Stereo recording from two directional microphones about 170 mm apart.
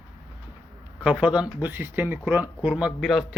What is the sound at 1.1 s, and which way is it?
A man's voice, 5° right (ahead or behind).